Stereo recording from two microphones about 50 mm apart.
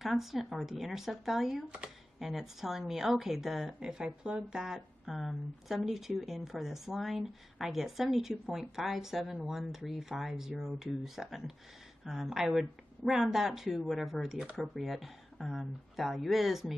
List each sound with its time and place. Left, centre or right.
0.0 s speech: centre
3.8 s speech: centre